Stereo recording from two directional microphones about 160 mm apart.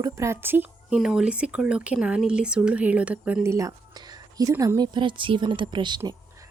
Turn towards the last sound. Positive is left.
turn(degrees=-25)  # may be behind; listen again after turning